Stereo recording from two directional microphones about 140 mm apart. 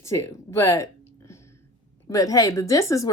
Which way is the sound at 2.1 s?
25° left (ahead or behind).